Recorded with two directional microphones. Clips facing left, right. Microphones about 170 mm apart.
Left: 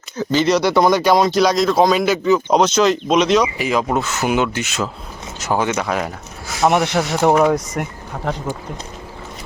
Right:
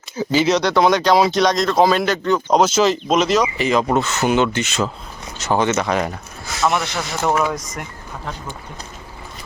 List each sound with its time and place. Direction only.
0.2 s speech: 10° right (ahead or behind)
6.7 s speech: 55° left (ahead or behind)